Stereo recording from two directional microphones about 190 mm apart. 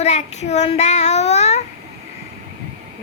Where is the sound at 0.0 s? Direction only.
35° left (ahead or behind).